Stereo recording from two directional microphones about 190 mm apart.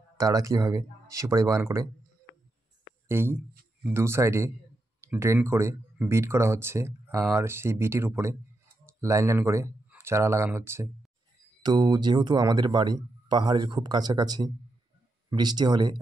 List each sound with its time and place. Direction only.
0.2 s speech: 20° right (ahead or behind)
3.1 s speech: 10° right (ahead or behind)